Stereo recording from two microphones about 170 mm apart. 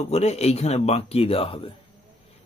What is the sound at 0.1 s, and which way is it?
Speech, 40° left (ahead or behind).